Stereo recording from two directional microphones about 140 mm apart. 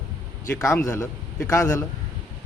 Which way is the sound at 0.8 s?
20° left (ahead or behind).